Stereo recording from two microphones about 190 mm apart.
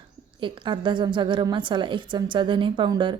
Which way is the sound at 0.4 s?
25° right (ahead or behind).